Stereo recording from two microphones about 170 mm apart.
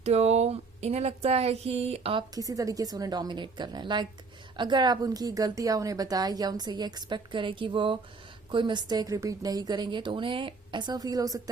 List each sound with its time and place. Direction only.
0.0 s speech: 40° right (ahead or behind)
2.3 s a woman's voice: 20° right (ahead or behind)